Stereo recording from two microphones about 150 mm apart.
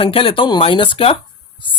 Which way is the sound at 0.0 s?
35° left (ahead or behind).